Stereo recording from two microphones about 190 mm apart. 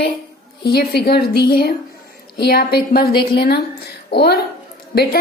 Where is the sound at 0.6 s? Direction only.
55° left (ahead or behind).